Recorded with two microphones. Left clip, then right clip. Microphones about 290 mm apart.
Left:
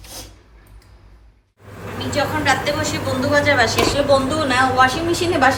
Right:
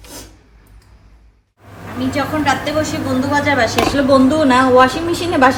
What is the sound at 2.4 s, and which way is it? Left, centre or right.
A woman's voice, right.